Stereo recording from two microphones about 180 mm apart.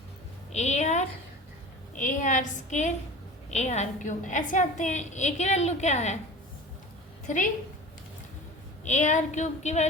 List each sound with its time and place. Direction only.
0.5 s a sound: 40° left (ahead or behind)
2.0 s a woman's voice: 45° left (ahead or behind)
7.3 s a woman's voice: 45° left (ahead or behind)
8.8 s a woman's voice: 40° left (ahead or behind)